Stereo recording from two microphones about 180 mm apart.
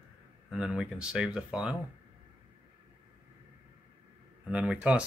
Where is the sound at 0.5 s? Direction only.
5° right (ahead or behind).